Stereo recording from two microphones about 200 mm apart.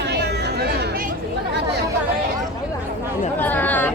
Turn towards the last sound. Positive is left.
turn(degrees=10)  # may be behind; listen again after turning